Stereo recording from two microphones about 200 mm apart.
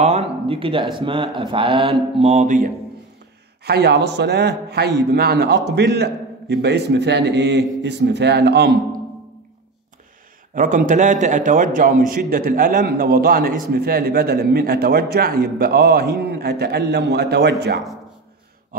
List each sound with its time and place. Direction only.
0.0 s speech: 30° right (ahead or behind)
3.6 s a man's voice: 55° right (ahead or behind)
10.5 s a man's voice: 40° right (ahead or behind)